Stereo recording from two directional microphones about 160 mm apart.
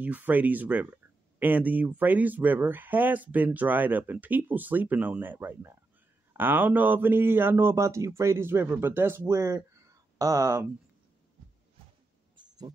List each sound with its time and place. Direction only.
0.0 s speech: 10° right (ahead or behind)